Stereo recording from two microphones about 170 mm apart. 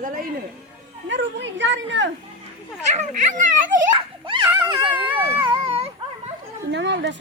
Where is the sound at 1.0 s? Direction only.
90° right.